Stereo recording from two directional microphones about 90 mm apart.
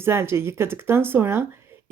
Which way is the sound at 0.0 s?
25° right (ahead or behind).